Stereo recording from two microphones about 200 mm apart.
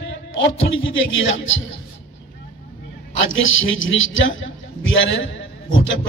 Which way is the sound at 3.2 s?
75° left (ahead or behind).